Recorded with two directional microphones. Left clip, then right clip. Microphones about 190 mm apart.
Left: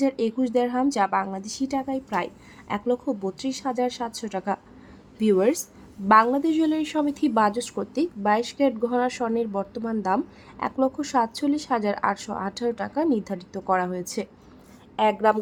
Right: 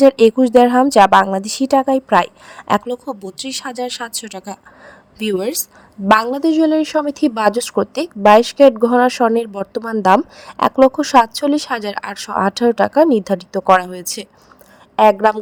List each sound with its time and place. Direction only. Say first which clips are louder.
0.0 s speech: right 15 dB; 45° right (ahead or behind)
4.4 s a woman's voice: left 2 dB; centre (ahead or behind)
6.3 s a woman's voice: right 9 dB; 35° right (ahead or behind)